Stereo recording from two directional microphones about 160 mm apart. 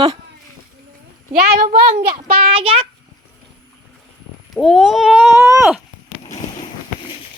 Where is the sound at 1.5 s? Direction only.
45° right (ahead or behind).